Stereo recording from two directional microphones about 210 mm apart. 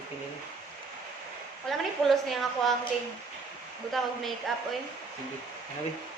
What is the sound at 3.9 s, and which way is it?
Speech, centre (ahead or behind).